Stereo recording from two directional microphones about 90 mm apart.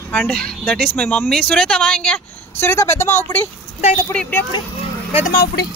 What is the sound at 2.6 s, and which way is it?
Speech, 30° left (ahead or behind).